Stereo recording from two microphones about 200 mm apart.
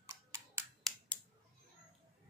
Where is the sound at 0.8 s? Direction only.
5° left (ahead or behind).